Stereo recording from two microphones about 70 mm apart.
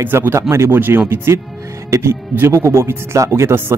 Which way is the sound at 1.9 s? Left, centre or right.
Right.